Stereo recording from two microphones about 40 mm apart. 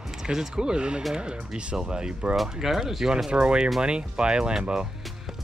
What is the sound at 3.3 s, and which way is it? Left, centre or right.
Speech, right.